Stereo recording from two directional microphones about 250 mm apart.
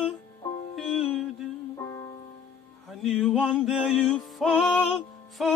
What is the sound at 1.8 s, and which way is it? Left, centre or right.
Music, centre.